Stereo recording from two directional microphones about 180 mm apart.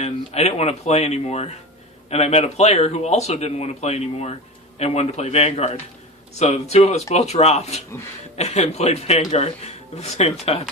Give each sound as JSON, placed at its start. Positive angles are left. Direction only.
{"t": 0.0, "sound": "speech", "side_deg": 35}